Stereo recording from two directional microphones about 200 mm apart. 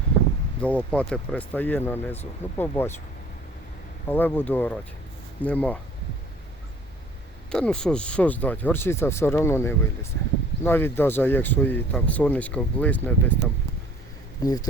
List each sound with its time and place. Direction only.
0.6 s speech: 5° left (ahead or behind)
4.1 s speech: 10° left (ahead or behind)
7.5 s speech: 5° left (ahead or behind)
14.4 s speech: 20° left (ahead or behind)